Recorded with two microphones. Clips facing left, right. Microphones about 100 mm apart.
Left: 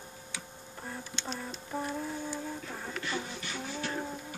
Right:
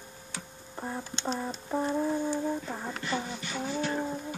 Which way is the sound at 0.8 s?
30° right (ahead or behind).